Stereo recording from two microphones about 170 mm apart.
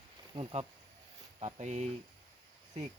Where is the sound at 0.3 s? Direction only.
25° right (ahead or behind).